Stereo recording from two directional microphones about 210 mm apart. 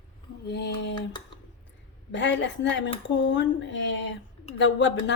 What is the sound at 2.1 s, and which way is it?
A woman's voice, 60° left (ahead or behind).